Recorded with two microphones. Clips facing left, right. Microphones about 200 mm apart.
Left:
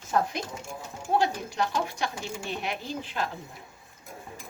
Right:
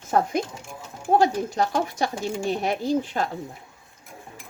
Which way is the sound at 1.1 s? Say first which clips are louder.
Right 6 dB; 45° right (ahead or behind).